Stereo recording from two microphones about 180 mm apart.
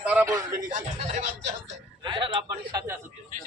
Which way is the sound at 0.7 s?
40° right (ahead or behind).